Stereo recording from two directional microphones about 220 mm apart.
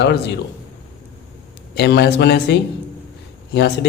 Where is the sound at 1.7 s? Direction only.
50° left (ahead or behind).